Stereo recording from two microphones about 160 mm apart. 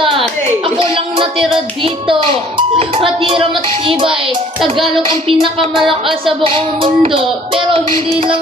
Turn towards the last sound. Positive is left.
turn(degrees=-35)  # may be behind; listen again after turning